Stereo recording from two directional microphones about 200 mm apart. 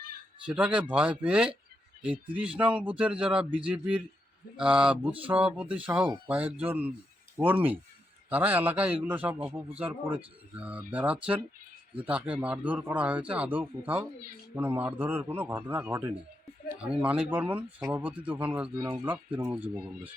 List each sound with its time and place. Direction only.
0.4 s speech: 5° right (ahead or behind)